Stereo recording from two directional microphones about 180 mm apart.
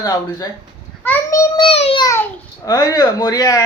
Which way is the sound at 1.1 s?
20° left (ahead or behind).